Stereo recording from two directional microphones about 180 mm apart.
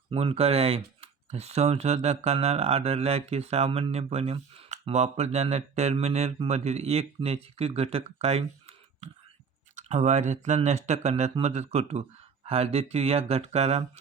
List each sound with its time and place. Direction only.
0.1 s speech: 35° right (ahead or behind)